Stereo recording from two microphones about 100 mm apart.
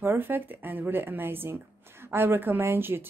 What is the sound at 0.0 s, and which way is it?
A woman's voice, 20° right (ahead or behind).